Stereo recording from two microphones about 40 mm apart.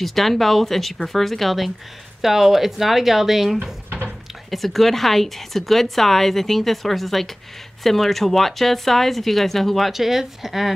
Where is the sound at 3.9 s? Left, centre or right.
Right.